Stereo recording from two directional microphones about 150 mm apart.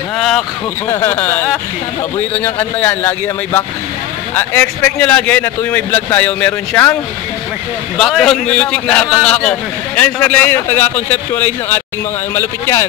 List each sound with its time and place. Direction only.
0.8 s a man's voice: 15° left (ahead or behind)
8.0 s a man's voice: 5° left (ahead or behind)